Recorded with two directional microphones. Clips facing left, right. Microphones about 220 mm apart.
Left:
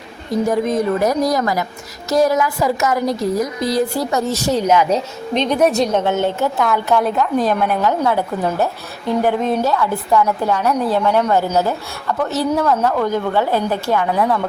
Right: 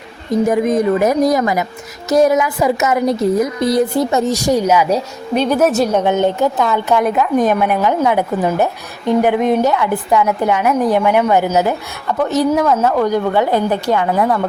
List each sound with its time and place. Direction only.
0.4 s a woman's voice: 20° right (ahead or behind)
12.5 s a woman's voice: 5° right (ahead or behind)